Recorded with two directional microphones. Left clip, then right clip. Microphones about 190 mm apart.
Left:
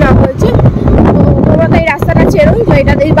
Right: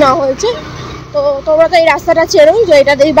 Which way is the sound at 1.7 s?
10° left (ahead or behind).